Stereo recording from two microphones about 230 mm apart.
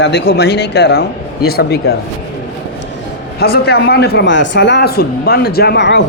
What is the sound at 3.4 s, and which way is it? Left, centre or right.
A man's voice, left.